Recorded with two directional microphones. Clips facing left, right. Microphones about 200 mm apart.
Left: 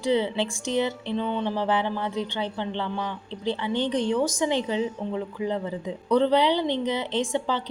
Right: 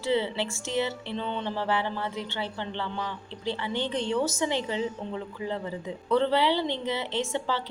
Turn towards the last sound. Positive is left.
turn(degrees=15)  # may be behind; listen again after turning